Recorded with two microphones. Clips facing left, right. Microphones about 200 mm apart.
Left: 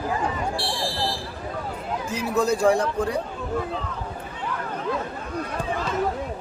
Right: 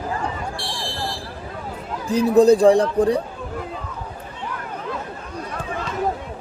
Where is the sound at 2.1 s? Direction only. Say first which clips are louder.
Right 10 dB; 35° right (ahead or behind).